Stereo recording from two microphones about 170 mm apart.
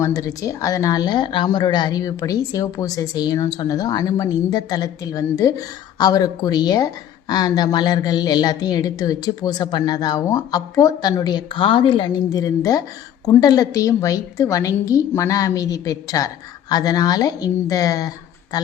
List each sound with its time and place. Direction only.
0.0 s speech: 20° left (ahead or behind)